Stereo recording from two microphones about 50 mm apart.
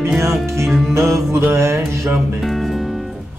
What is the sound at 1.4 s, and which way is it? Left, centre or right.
Music, right.